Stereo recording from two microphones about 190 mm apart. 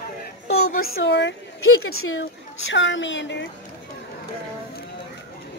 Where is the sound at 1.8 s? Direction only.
90° left.